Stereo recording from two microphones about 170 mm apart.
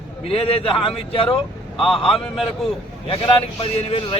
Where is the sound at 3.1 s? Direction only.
35° left (ahead or behind).